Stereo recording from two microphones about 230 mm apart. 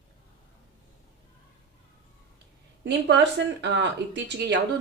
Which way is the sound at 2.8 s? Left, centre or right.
Right.